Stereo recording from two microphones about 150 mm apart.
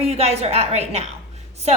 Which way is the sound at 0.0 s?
45° right (ahead or behind).